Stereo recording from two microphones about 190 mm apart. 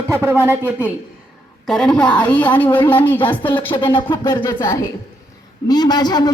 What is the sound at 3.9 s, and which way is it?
A man's voice, 25° left (ahead or behind).